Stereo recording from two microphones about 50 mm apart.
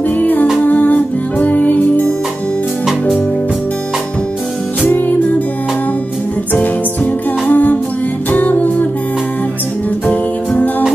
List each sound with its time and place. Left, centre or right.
0.2 s music: left
4.8 s music: left
7.4 s music: left
10.0 s music: left